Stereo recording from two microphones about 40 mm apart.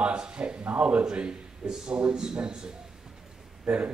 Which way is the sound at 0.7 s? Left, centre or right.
Right.